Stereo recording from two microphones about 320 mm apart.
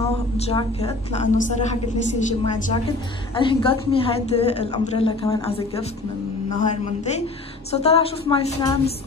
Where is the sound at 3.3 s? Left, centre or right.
Centre.